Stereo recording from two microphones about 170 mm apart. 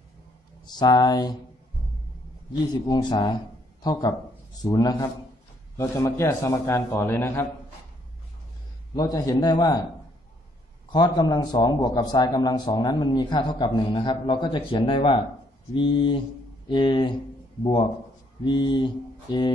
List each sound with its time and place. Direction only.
0.7 s a man's voice: 25° left (ahead or behind)
2.9 s a man's voice: 25° left (ahead or behind)
8.9 s a man's voice: 20° left (ahead or behind)
10.9 s a man's voice: 25° left (ahead or behind)
18.4 s a man's voice: 25° left (ahead or behind)